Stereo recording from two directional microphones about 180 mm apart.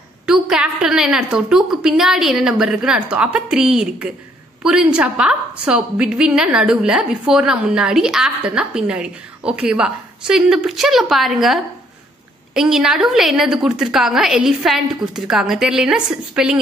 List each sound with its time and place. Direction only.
0.3 s a woman's voice: 5° right (ahead or behind)